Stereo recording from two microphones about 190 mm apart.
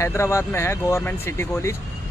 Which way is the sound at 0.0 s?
15° left (ahead or behind).